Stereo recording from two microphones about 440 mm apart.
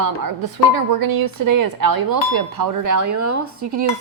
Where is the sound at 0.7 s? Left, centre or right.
Right.